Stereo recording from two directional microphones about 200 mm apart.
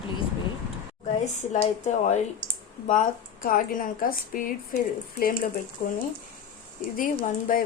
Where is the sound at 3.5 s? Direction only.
45° left (ahead or behind).